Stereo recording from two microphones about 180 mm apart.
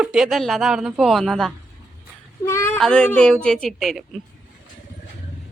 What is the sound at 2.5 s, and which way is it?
Speech, 15° left (ahead or behind).